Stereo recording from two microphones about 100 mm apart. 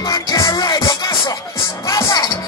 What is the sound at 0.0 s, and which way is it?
Music, 35° left (ahead or behind).